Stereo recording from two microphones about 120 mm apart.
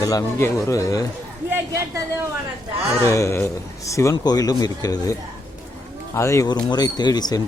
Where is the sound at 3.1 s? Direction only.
25° left (ahead or behind).